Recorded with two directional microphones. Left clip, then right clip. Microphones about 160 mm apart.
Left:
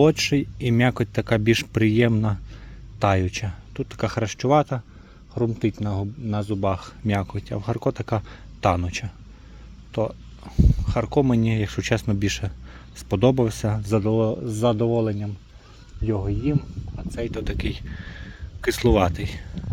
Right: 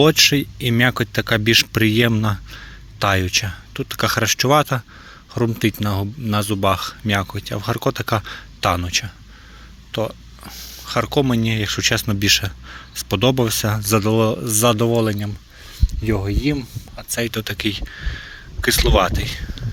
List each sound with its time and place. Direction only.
0.0 s speech: centre (ahead or behind); by 6.7 s 15° right (ahead or behind)
6.7 s speech: 5° left (ahead or behind); by 17.2 s 20° right (ahead or behind)
17.4 s speech: 10° left (ahead or behind)